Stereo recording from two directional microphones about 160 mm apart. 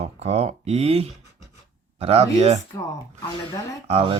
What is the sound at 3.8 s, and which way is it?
Speech, 35° right (ahead or behind).